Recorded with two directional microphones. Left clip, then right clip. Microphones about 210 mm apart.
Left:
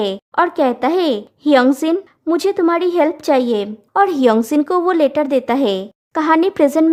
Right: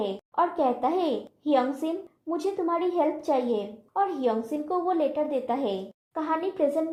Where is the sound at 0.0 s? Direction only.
35° left (ahead or behind).